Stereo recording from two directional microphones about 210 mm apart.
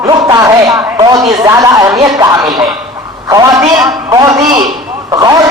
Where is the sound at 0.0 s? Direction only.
15° right (ahead or behind).